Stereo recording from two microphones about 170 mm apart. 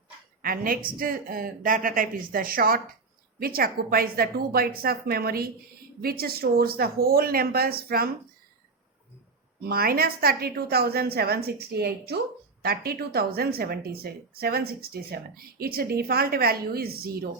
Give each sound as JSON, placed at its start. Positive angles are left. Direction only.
{"t": 0.4, "sound": "speech", "side_deg": -60}
{"t": 9.6, "sound": "speech", "side_deg": -60}